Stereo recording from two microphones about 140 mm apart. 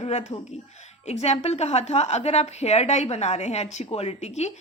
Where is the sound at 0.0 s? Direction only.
50° left (ahead or behind).